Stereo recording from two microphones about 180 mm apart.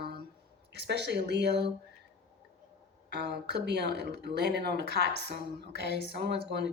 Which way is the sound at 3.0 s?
70° right (ahead or behind).